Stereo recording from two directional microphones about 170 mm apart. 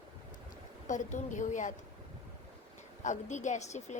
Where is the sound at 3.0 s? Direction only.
45° left (ahead or behind).